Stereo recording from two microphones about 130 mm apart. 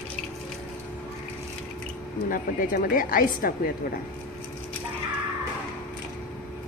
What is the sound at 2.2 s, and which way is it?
A woman's voice, 90° left.